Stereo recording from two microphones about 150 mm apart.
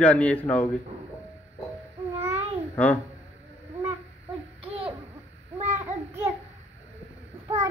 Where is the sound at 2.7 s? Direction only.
10° left (ahead or behind).